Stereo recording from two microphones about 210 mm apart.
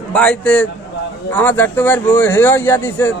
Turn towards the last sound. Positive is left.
turn(degrees=10)  # may be behind; listen again after turning